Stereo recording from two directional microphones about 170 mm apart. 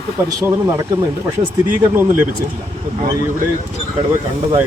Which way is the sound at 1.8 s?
15° right (ahead or behind).